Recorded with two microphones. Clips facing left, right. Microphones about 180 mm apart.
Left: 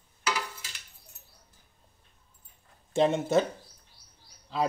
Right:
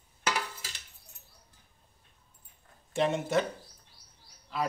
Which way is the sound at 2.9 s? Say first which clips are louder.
Left 4 dB; 25° left (ahead or behind).